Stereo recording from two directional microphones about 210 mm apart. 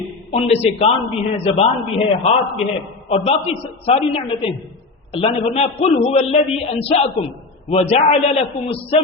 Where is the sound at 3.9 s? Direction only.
25° left (ahead or behind).